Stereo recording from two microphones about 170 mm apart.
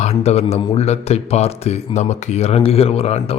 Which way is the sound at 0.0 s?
40° left (ahead or behind).